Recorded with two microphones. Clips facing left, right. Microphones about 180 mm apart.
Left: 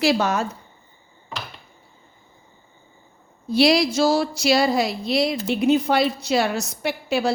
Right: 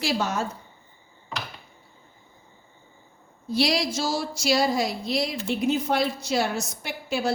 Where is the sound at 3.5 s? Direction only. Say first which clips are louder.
Left 7 dB; 65° left (ahead or behind).